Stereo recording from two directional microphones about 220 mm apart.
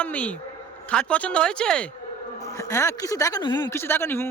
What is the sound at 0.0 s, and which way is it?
Speech, 5° left (ahead or behind).